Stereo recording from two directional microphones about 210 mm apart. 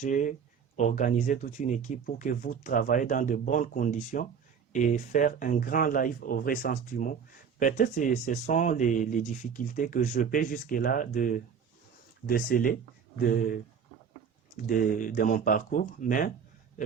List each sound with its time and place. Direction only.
0.0 s speech: 35° left (ahead or behind)
14.5 s speech: 40° left (ahead or behind)